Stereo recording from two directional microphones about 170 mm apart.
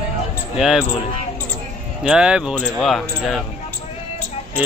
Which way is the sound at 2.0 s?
5° right (ahead or behind).